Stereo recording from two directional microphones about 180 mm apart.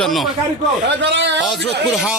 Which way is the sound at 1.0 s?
75° right (ahead or behind).